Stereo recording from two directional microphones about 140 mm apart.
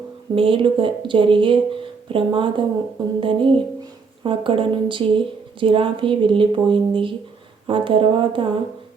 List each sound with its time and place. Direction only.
0.3 s speech: 40° right (ahead or behind)